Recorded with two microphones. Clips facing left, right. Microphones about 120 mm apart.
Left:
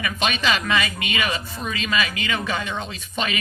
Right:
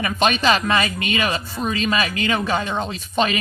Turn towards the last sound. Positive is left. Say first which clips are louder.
# right 6 dB
turn(degrees=-40)  # may be behind; listen again after turning